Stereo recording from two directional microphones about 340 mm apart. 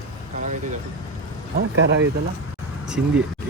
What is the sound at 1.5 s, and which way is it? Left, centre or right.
Speech, right.